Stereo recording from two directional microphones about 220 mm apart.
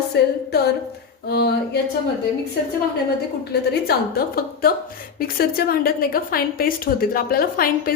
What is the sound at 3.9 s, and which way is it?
A woman's voice, 45° left (ahead or behind).